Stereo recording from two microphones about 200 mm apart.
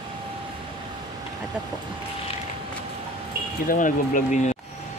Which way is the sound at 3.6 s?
40° left (ahead or behind).